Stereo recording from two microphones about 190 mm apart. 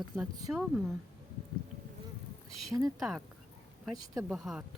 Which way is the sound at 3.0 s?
Centre (ahead or behind).